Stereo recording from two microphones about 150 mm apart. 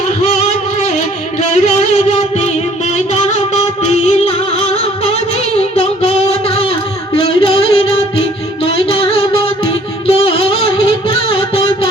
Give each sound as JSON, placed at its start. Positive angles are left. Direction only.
{"t": 1.7, "sound": "music", "side_deg": 45}
{"t": 5.5, "sound": "music", "side_deg": 40}
{"t": 7.2, "sound": "music", "side_deg": 40}